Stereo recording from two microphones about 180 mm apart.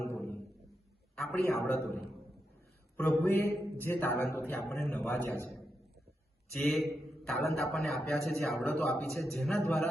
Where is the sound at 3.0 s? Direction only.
10° left (ahead or behind).